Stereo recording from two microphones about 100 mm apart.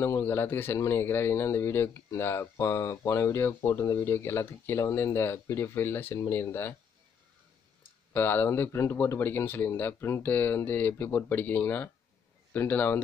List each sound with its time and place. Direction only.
0.0 s a man's voice: 25° left (ahead or behind)
8.1 s a man's voice: 20° left (ahead or behind)